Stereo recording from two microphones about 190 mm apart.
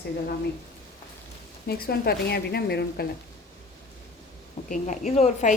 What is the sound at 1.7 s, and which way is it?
A woman's voice, 55° left (ahead or behind).